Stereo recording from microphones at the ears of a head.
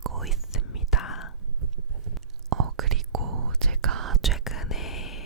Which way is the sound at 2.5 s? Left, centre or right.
Right.